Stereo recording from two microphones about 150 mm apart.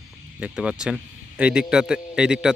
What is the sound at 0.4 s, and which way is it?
A man's voice, 5° right (ahead or behind).